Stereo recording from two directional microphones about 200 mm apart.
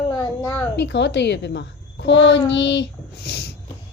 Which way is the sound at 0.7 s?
60° left (ahead or behind).